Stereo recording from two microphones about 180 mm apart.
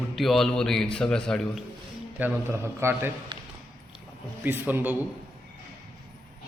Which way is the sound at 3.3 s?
25° right (ahead or behind).